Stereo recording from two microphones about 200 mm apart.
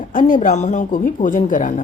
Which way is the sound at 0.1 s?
40° left (ahead or behind).